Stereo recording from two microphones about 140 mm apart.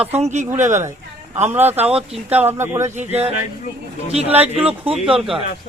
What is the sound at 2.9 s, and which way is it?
Speech, 50° right (ahead or behind).